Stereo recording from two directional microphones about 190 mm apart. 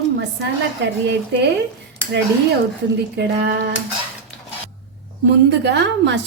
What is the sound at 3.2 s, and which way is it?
Speech, 60° right (ahead or behind).